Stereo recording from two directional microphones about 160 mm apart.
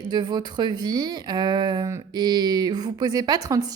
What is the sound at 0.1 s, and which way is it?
A woman's voice, 25° right (ahead or behind).